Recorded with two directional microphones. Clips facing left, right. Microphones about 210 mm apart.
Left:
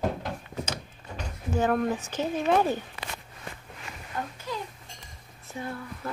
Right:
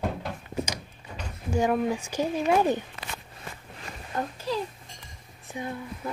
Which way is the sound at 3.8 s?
35° right (ahead or behind).